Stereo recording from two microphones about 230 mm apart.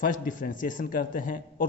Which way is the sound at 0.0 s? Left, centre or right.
Left.